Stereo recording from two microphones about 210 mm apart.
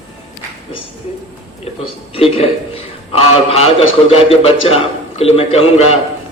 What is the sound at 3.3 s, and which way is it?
A man's voice, 30° left (ahead or behind).